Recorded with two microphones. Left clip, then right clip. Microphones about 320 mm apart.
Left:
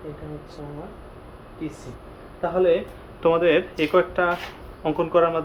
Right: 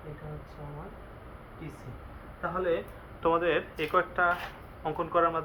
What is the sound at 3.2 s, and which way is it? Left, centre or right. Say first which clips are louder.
Speech: left 8 dB; left.